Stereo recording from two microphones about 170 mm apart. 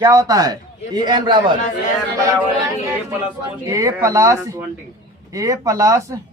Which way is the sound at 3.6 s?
20° right (ahead or behind).